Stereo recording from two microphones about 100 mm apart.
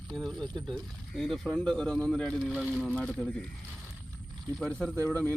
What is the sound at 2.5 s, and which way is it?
Speech, 10° right (ahead or behind).